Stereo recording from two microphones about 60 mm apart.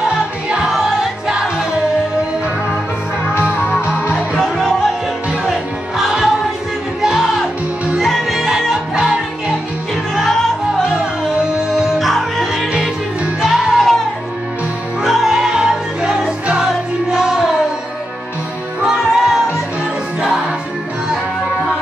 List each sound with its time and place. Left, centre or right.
0.7 s music: centre
4.1 s music: centre
11.3 s music: centre
12.0 s music: centre
12.7 s music: centre
15.0 s music: centre
18.8 s music: centre